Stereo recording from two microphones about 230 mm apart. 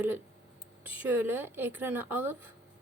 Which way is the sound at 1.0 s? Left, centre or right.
Centre.